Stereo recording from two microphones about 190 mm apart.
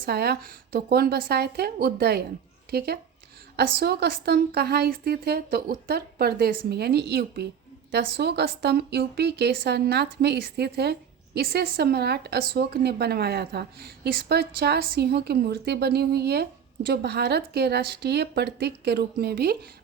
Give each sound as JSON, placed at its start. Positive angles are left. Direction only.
{"t": 0.0, "sound": "speech", "side_deg": -55}